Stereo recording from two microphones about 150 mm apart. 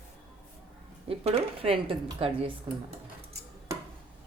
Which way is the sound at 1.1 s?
40° right (ahead or behind).